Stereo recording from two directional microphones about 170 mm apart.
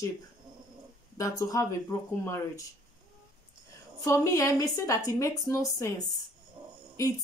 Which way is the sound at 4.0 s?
20° left (ahead or behind).